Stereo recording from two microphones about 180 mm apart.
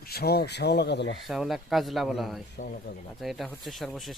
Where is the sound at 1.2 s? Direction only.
Centre (ahead or behind).